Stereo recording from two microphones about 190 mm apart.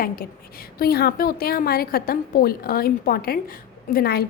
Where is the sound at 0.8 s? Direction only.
55° left (ahead or behind).